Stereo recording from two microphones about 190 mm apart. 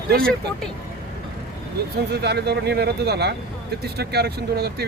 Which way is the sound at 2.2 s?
60° right (ahead or behind).